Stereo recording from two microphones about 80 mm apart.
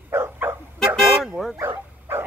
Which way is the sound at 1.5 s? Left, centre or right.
Right.